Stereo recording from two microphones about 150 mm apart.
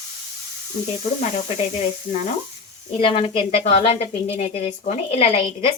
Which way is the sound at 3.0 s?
35° left (ahead or behind).